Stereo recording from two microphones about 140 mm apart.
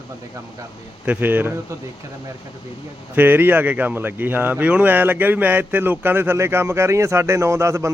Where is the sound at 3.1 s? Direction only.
15° right (ahead or behind).